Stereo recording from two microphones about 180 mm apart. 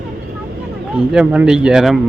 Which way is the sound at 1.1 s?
5° right (ahead or behind).